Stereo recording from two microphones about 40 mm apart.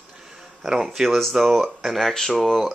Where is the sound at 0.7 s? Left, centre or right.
Centre.